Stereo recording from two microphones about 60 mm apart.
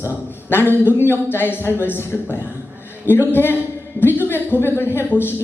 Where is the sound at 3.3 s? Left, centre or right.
Left.